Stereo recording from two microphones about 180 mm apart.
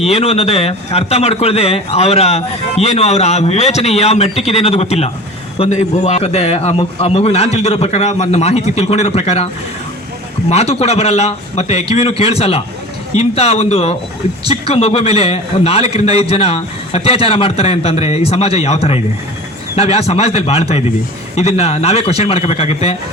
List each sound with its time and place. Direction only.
0.0 s a man's voice: 35° left (ahead or behind)
10.5 s a man's voice: 35° left (ahead or behind)